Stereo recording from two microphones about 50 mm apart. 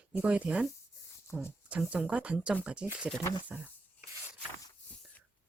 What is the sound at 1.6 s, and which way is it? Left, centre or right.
Speech, right.